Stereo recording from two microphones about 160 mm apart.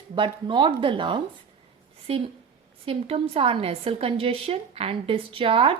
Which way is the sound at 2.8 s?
35° right (ahead or behind).